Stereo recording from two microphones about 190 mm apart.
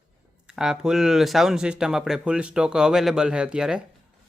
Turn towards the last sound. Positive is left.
turn(degrees=-5)  # may be behind; listen again after turning